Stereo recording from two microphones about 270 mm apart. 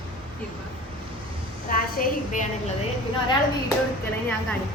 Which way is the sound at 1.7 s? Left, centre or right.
Left.